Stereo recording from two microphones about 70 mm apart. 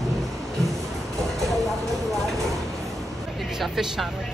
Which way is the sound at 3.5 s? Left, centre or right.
Centre.